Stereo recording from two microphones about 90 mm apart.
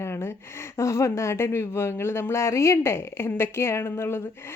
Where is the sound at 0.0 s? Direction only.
30° left (ahead or behind).